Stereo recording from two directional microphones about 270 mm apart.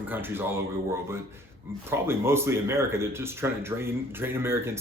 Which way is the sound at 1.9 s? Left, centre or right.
Centre.